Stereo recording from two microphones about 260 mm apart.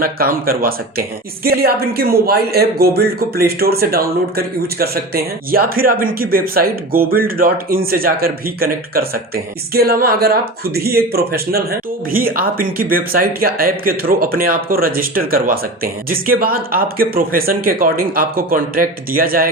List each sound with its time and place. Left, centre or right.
0.0 s speech: right